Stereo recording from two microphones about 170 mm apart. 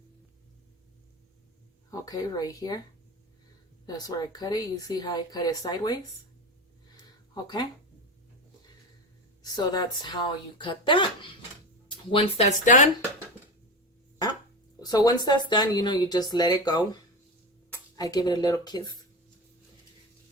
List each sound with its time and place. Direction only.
1.9 s speech: 20° left (ahead or behind)
3.8 s speech: 20° left (ahead or behind)
7.4 s speech: 25° left (ahead or behind)
9.4 s speech: 25° left (ahead or behind); by 12.9 s 45° left (ahead or behind)
14.8 s speech: 20° left (ahead or behind)